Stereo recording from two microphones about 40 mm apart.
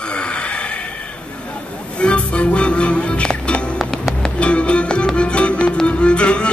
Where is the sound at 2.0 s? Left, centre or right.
Left.